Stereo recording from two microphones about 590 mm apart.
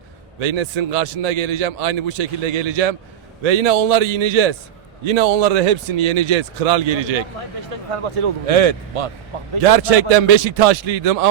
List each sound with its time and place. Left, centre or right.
0.3 s a man's voice: right
7.7 s speech: right
9.6 s a man's voice: right